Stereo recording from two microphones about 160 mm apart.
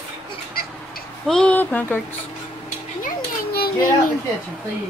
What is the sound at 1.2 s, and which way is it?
Speech, 5° left (ahead or behind).